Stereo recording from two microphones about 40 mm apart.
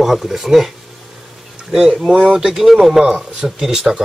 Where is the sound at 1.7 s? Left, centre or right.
Centre.